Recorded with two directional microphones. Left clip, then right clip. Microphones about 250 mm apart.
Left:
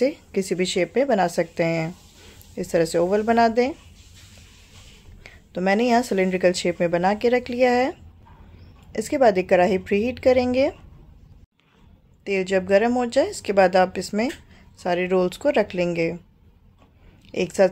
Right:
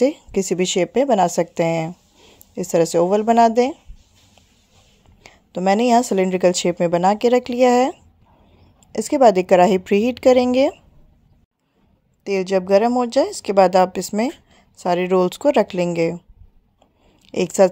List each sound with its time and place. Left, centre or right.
0.0 s speech: right
5.2 s a woman's voice: right
12.3 s speech: right
17.3 s speech: right